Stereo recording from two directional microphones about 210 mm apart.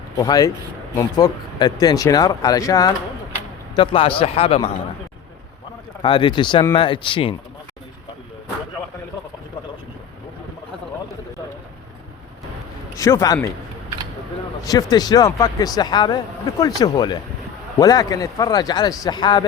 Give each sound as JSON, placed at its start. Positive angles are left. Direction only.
{"t": 0.2, "sound": "speech", "side_deg": 15}
{"t": 6.0, "sound": "speech", "side_deg": 25}
{"t": 13.0, "sound": "speech", "side_deg": 15}
{"t": 14.6, "sound": "speech", "side_deg": 15}